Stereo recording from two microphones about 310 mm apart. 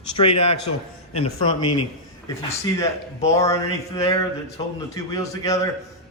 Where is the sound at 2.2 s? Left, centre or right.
Centre.